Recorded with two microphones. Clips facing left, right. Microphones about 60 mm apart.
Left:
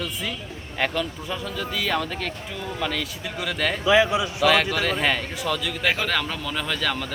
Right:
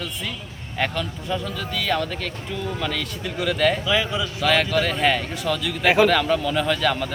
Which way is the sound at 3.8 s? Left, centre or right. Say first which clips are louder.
Left 4 dB; centre.